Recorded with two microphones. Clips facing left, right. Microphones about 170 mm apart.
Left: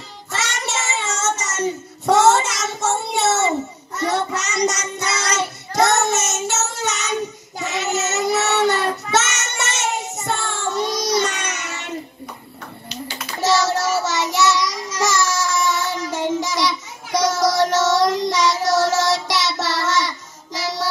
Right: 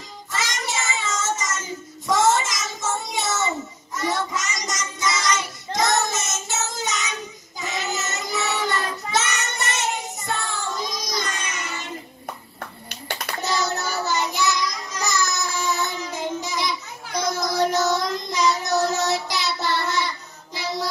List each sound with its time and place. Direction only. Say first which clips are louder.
0.3 s child singing: left 2 dB; 70° left (ahead or behind)
13.4 s child singing: left 8 dB; 90° left
20.5 s music: left 2 dB; 90° left